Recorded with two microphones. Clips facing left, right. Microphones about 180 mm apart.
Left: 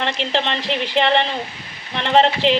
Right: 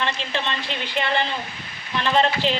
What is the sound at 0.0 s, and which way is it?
A woman's voice, 75° left (ahead or behind).